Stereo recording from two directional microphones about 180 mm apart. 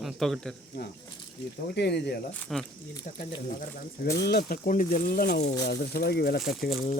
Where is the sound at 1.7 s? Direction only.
70° left (ahead or behind).